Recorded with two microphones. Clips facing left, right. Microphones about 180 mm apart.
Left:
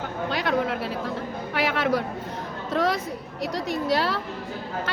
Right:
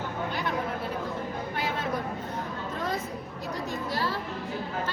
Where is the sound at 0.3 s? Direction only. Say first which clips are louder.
Left 8 dB; 90° left.